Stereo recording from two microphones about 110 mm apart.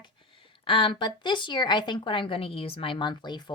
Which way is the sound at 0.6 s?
55° left (ahead or behind).